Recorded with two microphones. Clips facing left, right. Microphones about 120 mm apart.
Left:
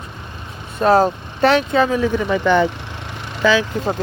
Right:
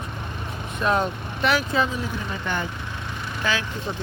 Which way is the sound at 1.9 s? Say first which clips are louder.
Left 12 dB; 90° left.